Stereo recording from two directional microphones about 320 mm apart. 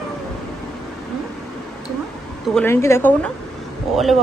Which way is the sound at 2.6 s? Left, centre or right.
Centre.